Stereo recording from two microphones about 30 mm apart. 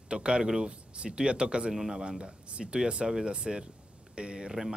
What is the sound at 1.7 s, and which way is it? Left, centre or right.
Speech, centre.